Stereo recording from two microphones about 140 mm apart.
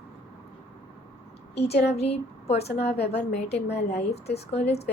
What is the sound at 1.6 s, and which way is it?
A woman's voice, 50° left (ahead or behind).